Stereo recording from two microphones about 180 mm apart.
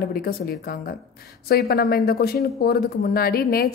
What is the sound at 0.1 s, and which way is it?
Speech, 55° left (ahead or behind).